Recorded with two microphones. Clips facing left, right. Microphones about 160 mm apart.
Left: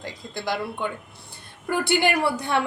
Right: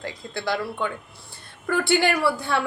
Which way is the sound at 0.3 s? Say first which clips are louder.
Right 1 dB; 15° left (ahead or behind).